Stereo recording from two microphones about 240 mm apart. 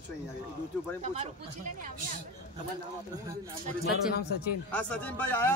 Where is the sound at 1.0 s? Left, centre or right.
Right.